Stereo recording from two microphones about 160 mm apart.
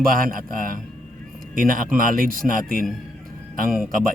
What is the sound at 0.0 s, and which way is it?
A man's voice, 60° right (ahead or behind).